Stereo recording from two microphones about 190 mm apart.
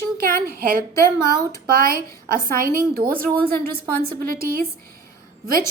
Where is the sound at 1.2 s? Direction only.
15° left (ahead or behind).